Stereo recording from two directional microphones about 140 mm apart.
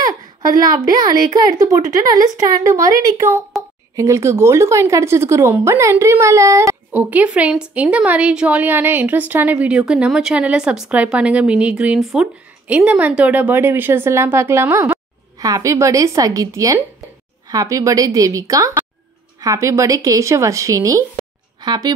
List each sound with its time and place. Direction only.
0.0 s a sound: 30° right (ahead or behind)
0.8 s a woman's voice: 30° right (ahead or behind)
6.9 s a woman's voice: 10° right (ahead or behind); by 21.9 s 30° right (ahead or behind)